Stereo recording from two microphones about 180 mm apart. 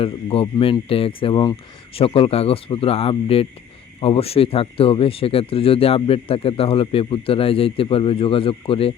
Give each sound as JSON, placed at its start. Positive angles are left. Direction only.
{"t": 0.0, "sound": "speech", "side_deg": 30}